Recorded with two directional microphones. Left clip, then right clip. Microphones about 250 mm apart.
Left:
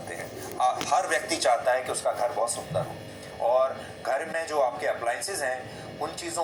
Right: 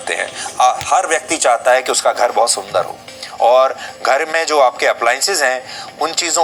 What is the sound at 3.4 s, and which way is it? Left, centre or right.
A man's voice, right.